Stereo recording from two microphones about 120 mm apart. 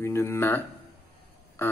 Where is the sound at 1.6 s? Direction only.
20° left (ahead or behind).